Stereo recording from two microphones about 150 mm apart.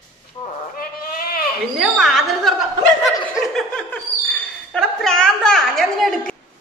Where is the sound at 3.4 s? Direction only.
5° left (ahead or behind).